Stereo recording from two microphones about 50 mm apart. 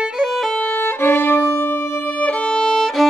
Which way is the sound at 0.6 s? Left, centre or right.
Left.